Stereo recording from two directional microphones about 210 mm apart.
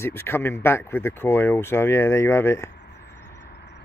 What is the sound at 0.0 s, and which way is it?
Speech, 10° left (ahead or behind).